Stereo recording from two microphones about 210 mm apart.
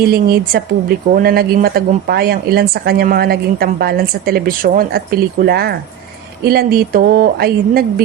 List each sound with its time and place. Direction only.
0.1 s a woman's voice: 45° right (ahead or behind)